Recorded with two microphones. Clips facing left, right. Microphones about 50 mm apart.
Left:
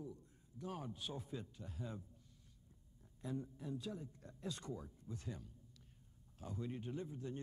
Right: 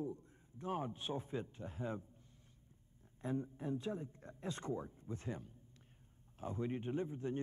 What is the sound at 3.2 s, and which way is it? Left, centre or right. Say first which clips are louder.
A man's voice: right 5 dB; right.